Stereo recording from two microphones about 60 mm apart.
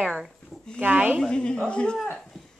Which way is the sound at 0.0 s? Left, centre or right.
Centre.